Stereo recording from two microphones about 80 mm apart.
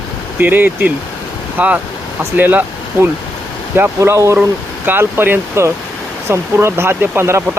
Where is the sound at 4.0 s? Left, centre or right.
Right.